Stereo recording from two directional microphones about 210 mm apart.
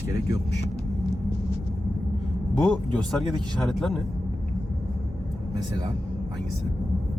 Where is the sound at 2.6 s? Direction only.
Centre (ahead or behind).